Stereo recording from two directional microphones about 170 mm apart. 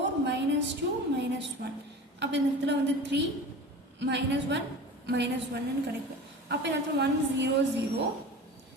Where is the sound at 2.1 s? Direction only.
90° right.